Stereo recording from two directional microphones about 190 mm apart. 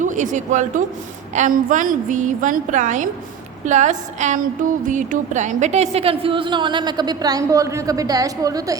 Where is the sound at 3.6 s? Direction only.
40° right (ahead or behind); by 8.7 s 20° right (ahead or behind).